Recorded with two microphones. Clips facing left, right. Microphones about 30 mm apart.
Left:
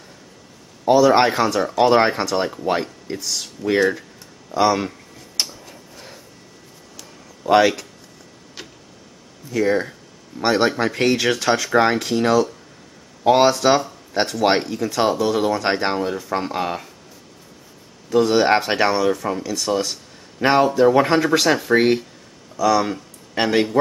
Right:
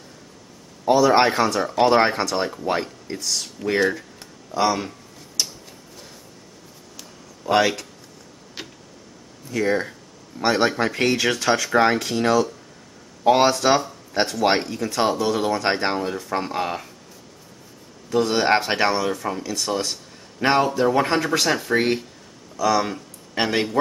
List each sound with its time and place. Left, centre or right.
0.8 s speech: centre
5.4 s a sound: left
7.4 s speech: centre
8.6 s tick-tock: centre
9.5 s speech: centre
18.1 s speech: centre